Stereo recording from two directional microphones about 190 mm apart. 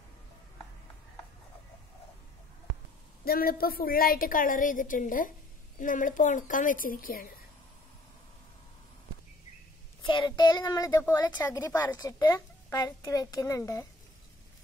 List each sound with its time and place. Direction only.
3.3 s a woman's voice: 50° left (ahead or behind)
10.0 s a child's voice: 25° left (ahead or behind)